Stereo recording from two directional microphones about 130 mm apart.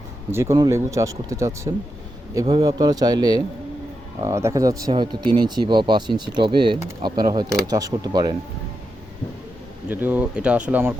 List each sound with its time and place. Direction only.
0.3 s speech: 20° right (ahead or behind)
4.9 s speech: 40° right (ahead or behind)
9.9 s speech: 15° right (ahead or behind)